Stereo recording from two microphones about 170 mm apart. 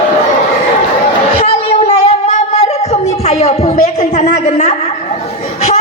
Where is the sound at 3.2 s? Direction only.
40° left (ahead or behind).